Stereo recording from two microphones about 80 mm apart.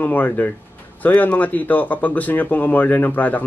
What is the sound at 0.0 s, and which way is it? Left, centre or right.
Speech, left.